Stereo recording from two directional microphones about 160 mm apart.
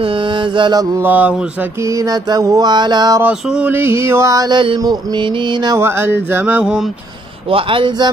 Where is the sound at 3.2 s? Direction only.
5° right (ahead or behind); by 5.7 s 30° right (ahead or behind).